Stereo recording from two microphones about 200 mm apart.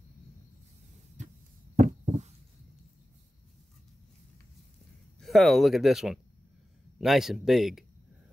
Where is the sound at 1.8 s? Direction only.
35° right (ahead or behind).